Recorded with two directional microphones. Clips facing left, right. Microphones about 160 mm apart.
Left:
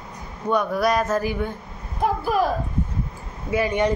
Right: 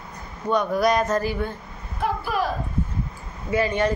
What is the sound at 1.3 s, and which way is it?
Speech, 15° left (ahead or behind).